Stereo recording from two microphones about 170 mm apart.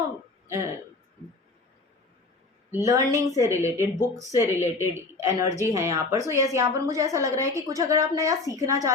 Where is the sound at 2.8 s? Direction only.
20° right (ahead or behind).